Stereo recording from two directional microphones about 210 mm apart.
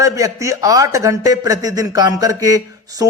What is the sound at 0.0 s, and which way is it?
Speech, 15° right (ahead or behind).